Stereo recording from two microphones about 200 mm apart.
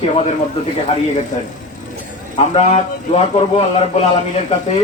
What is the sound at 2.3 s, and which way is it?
A man's voice, 30° left (ahead or behind).